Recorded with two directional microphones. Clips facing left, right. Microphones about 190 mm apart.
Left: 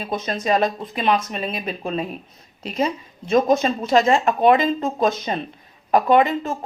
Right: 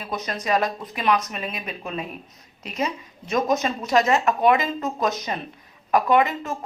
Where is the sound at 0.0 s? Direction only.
25° left (ahead or behind).